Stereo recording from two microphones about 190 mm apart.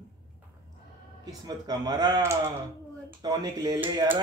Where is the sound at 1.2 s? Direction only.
20° right (ahead or behind).